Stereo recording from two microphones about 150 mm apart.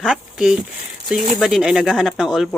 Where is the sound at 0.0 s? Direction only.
5° right (ahead or behind).